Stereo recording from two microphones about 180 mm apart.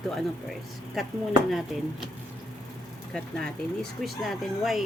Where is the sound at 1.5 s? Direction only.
Centre (ahead or behind).